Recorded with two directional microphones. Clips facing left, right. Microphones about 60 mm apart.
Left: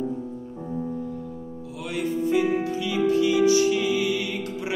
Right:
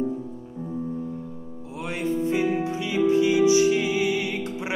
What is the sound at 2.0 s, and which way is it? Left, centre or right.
Music, right.